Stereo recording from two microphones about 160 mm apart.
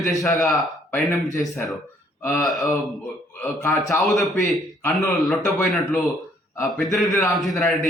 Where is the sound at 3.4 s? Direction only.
15° left (ahead or behind).